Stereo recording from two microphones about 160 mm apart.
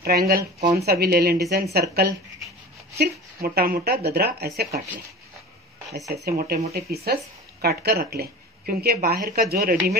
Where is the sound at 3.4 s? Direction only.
70° right (ahead or behind).